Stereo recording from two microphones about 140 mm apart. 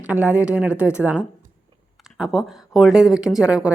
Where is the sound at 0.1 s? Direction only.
10° right (ahead or behind).